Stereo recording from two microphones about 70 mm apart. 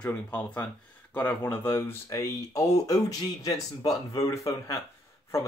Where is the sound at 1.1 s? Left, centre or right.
Left.